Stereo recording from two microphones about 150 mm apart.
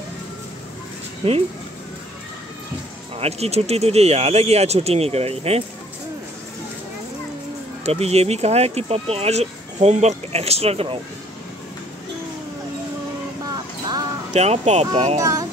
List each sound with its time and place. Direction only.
1.2 s speech: 40° right (ahead or behind)
3.2 s speech: 45° right (ahead or behind)
7.8 s speech: 45° right (ahead or behind)
14.3 s speech: 45° right (ahead or behind)
15.1 s speech: 20° right (ahead or behind)